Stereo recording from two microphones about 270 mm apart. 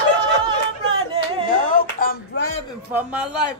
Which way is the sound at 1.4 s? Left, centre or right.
Left.